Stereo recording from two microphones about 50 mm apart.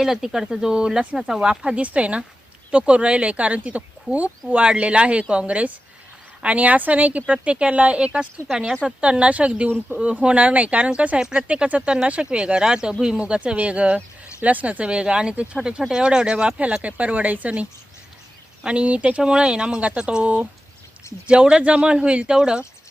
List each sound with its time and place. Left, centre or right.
0.0 s speech: centre; by 9.6 s right
9.6 s speech: right
14.8 s speech: centre